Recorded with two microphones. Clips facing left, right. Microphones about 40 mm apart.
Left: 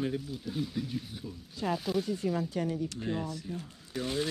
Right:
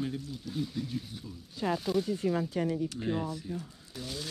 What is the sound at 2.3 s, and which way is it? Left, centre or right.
Speech, right.